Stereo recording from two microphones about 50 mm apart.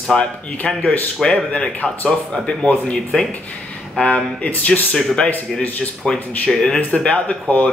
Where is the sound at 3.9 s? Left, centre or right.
Left.